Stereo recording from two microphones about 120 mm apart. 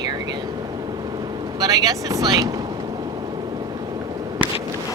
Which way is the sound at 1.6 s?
30° right (ahead or behind).